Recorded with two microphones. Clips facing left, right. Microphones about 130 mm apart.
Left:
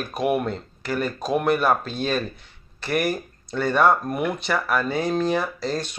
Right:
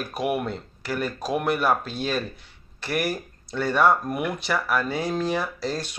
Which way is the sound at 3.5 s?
15° left (ahead or behind).